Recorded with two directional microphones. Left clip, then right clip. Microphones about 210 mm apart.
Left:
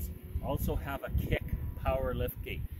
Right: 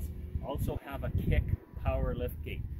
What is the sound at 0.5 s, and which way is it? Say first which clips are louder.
Speech: left 2 dB; 5° right (ahead or behind).